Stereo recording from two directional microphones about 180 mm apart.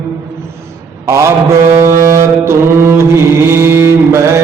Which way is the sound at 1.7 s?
15° right (ahead or behind).